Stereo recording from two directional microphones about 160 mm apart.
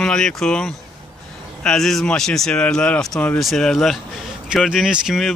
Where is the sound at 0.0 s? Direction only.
5° left (ahead or behind).